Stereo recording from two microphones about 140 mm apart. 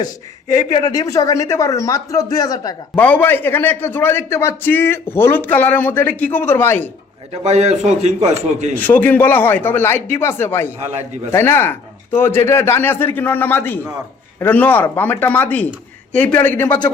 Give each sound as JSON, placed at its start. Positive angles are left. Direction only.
{"t": 0.7, "sound": "a man's voice", "side_deg": 25}
{"t": 2.9, "sound": "a man's voice", "side_deg": 10}
{"t": 7.4, "sound": "a man's voice", "side_deg": -50}
{"t": 8.7, "sound": "a man's voice", "side_deg": 10}